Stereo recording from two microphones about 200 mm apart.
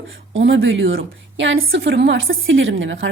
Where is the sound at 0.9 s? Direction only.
55° right (ahead or behind).